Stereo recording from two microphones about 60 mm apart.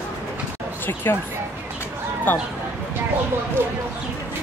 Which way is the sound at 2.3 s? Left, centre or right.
Left.